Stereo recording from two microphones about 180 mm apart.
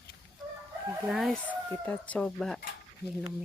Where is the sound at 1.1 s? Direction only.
5° right (ahead or behind).